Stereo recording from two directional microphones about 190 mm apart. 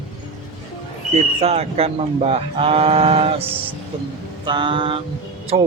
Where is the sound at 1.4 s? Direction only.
35° right (ahead or behind).